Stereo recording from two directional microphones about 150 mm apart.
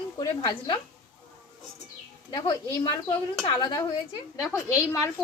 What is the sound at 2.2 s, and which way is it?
Speech, 25° left (ahead or behind).